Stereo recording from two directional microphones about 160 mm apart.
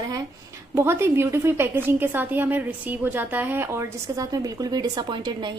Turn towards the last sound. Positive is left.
turn(degrees=-30)  # may be behind; listen again after turning